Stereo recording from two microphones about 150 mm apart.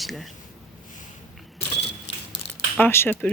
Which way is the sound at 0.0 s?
Centre (ahead or behind).